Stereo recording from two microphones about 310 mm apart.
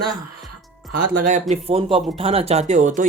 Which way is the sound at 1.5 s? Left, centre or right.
Centre.